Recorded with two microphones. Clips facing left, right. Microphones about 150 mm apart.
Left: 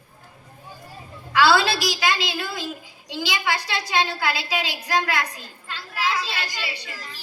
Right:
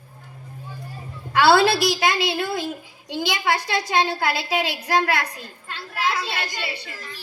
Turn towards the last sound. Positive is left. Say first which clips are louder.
# right 2 dB
turn(degrees=-50)  # may be behind; listen again after turning